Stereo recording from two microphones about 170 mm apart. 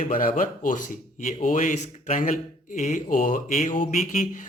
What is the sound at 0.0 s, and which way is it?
Speech, 55° left (ahead or behind).